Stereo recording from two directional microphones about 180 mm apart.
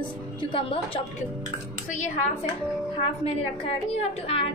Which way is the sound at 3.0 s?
35° left (ahead or behind).